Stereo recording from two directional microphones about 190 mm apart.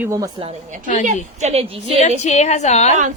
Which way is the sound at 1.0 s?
35° right (ahead or behind).